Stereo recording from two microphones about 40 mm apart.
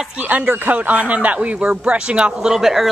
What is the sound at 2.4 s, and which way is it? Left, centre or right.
Speech, centre.